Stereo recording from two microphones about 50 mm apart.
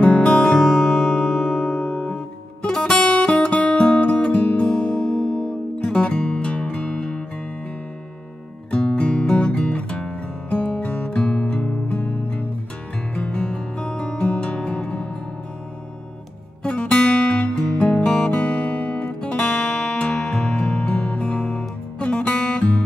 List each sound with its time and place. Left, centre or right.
0.0 s music: left
3.0 s music: left
8.6 s music: left
16.6 s music: centre
18.4 s music: left